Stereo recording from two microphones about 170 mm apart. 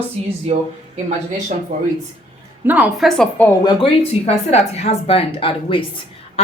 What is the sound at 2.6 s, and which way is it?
Speech, 10° right (ahead or behind).